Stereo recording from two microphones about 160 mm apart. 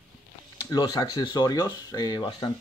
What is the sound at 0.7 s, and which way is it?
Speech, 25° left (ahead or behind).